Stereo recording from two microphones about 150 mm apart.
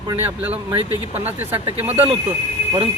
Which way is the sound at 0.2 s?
15° right (ahead or behind).